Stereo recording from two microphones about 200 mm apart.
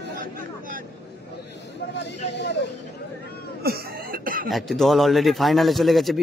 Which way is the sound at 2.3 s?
60° left (ahead or behind).